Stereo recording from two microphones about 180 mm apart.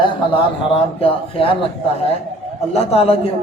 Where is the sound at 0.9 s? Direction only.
30° left (ahead or behind).